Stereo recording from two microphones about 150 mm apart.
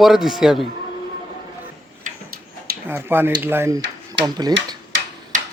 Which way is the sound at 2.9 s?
15° right (ahead or behind).